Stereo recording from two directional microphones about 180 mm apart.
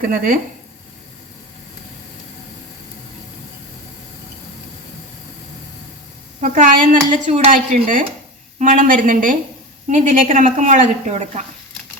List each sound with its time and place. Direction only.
0.0 s speech: 50° right (ahead or behind)
6.4 s speech: 50° right (ahead or behind)